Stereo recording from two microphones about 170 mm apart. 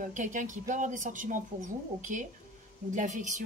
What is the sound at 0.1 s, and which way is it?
A woman's voice, 50° right (ahead or behind).